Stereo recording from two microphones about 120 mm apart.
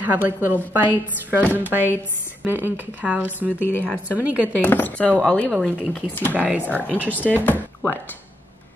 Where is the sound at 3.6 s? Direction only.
15° left (ahead or behind).